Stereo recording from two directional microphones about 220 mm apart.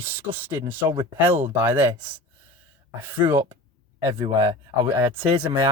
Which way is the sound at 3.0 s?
10° right (ahead or behind).